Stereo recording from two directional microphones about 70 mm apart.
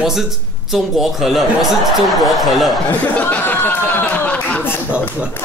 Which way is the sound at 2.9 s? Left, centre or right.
Left.